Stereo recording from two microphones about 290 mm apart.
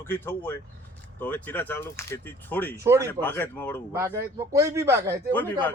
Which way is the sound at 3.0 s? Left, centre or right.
Centre.